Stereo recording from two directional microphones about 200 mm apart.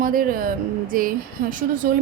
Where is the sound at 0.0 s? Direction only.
45° right (ahead or behind).